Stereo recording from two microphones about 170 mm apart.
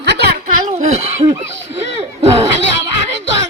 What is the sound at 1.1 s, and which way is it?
Laughter, 40° right (ahead or behind).